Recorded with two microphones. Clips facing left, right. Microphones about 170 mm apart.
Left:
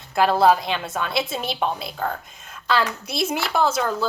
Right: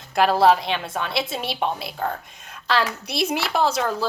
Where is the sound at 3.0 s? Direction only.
60° right (ahead or behind).